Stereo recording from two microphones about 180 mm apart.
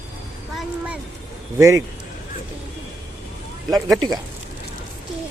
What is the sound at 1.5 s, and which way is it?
Speech, 15° right (ahead or behind).